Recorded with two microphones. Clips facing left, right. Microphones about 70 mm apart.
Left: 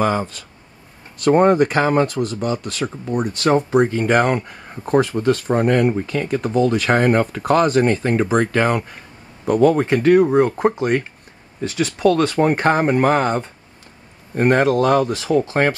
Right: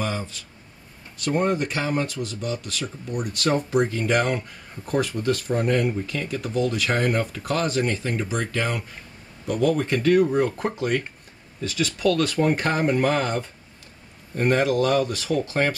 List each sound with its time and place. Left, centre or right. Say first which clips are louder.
0.0 s speech: left 9 dB; left
3.2 s speech: left 6 dB; left
9.9 s speech: left 5 dB; left
14.5 s speech: left 5 dB; left